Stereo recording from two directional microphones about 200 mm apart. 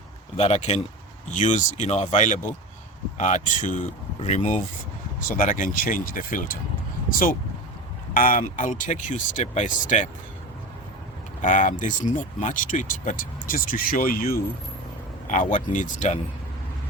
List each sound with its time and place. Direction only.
0.3 s speech: 30° left (ahead or behind)
11.4 s speech: 40° left (ahead or behind)